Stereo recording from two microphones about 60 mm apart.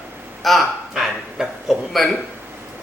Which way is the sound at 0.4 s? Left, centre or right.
Centre.